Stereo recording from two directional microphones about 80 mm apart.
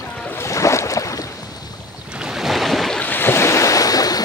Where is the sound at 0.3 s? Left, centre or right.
Left.